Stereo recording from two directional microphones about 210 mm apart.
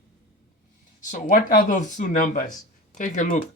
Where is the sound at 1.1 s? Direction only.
40° left (ahead or behind).